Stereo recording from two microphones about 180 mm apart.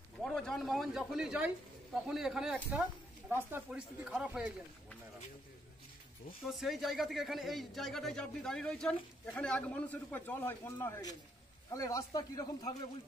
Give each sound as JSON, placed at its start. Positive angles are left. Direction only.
{"t": 0.2, "sound": "speech", "side_deg": 0}
{"t": 6.5, "sound": "a man's voice", "side_deg": 0}